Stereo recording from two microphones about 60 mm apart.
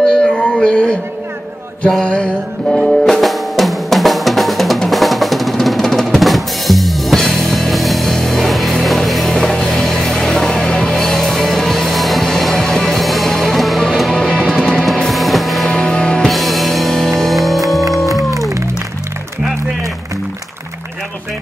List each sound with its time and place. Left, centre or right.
0.0 s music: centre
2.0 s music: centre
2.8 s drum: centre
15.7 s music: centre
16.3 s music: centre